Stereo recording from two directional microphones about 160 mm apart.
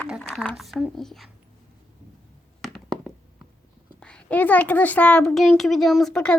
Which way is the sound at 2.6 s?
Centre (ahead or behind).